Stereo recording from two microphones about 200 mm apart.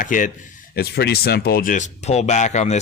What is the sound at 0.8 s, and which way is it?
A man's voice, 50° left (ahead or behind).